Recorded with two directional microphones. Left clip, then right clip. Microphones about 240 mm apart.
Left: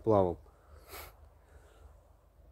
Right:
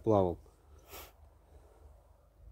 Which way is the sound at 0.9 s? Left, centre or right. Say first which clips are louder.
Left 2 dB; centre.